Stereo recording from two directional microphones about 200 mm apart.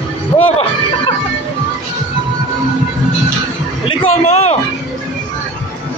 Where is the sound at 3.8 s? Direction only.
35° left (ahead or behind).